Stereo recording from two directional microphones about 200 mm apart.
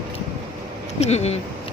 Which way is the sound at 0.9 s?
35° left (ahead or behind).